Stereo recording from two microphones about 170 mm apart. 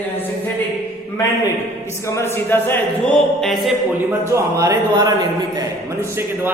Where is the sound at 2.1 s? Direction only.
15° left (ahead or behind).